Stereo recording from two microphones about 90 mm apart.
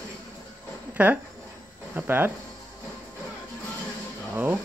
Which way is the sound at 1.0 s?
15° right (ahead or behind).